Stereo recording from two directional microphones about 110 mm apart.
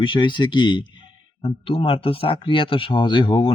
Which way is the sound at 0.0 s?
45° left (ahead or behind).